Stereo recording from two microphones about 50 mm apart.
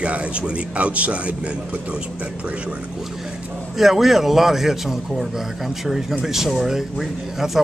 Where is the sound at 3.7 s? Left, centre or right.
Centre.